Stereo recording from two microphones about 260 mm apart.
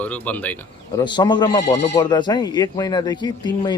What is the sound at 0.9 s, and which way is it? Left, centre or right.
Speech, centre.